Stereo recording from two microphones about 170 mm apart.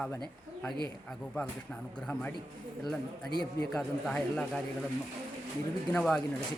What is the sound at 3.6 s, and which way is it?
Speech, 5° left (ahead or behind).